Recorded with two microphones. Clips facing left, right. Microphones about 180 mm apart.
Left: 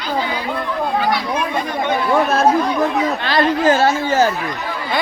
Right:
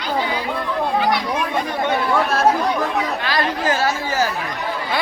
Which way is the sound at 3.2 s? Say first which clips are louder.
Left 5 dB; 25° left (ahead or behind).